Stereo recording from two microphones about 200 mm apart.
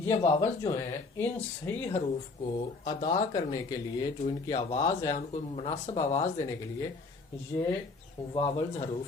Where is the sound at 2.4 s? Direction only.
25° left (ahead or behind).